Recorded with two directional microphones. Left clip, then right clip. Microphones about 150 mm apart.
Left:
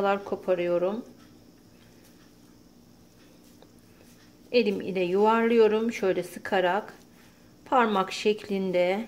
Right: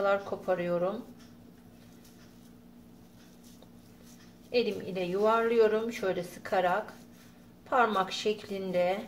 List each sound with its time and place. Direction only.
0.0 s speech: 75° left (ahead or behind)
4.5 s a woman's voice: 85° left